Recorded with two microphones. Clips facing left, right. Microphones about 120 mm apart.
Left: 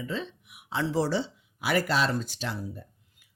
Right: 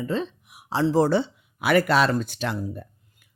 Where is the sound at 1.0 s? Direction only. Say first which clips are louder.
Right 7 dB; 55° right (ahead or behind).